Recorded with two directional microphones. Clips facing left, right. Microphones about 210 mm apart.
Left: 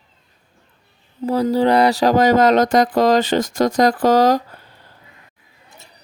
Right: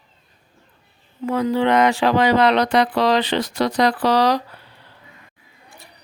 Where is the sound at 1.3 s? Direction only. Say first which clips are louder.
Left 2 dB; 35° left (ahead or behind).